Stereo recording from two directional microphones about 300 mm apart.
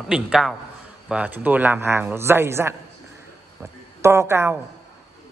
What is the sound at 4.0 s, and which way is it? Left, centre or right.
Speech, centre.